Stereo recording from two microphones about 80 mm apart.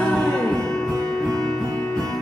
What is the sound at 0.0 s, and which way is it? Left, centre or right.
Music, centre.